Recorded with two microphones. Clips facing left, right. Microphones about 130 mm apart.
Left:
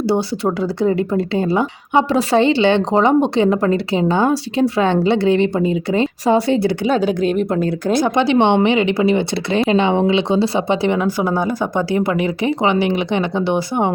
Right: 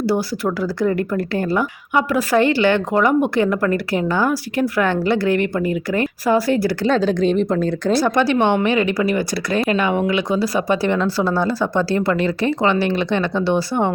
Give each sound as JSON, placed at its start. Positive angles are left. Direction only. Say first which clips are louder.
{"t": 0.1, "sound": "speech", "louder": "left 2 dB", "side_deg": 25}
{"t": 6.8, "sound": "speech", "louder": "even", "side_deg": 10}
{"t": 7.9, "sound": "speech", "louder": "left 3 dB", "side_deg": 20}